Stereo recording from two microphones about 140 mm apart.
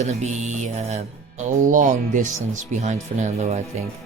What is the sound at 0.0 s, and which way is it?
Speech, 55° right (ahead or behind).